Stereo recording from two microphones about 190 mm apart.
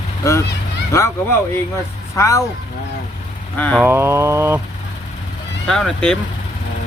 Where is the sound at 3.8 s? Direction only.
10° right (ahead or behind).